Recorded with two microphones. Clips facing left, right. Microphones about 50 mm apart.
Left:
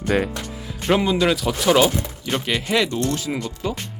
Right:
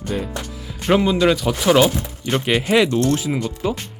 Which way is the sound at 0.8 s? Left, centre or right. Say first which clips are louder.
Right 2 dB; centre.